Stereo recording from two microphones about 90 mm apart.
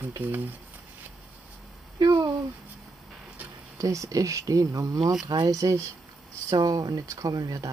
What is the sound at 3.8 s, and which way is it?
Speech, 40° right (ahead or behind).